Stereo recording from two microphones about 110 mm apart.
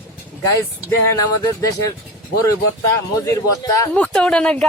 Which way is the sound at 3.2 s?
30° left (ahead or behind).